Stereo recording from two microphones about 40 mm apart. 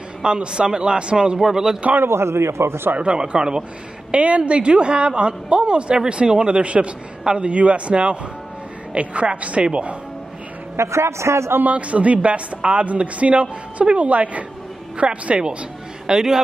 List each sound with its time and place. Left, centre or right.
0.2 s a woman's voice: right
1.4 s a man's voice: centre
2.0 s a man's voice: right
3.0 s a woman's voice: right
4.1 s a woman's voice: right
11.3 s a man's voice: right
11.6 s speech: right
16.1 s a man's voice: centre